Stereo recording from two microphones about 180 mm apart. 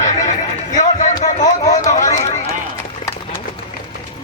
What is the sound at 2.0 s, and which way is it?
Run, 20° left (ahead or behind).